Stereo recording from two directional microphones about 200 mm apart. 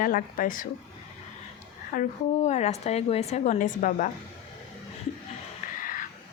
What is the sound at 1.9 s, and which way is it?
Speech, 35° left (ahead or behind).